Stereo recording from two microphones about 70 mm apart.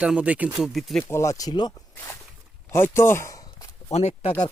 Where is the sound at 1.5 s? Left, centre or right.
Left.